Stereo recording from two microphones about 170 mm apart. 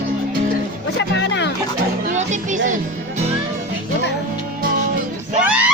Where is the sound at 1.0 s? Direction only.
90° left.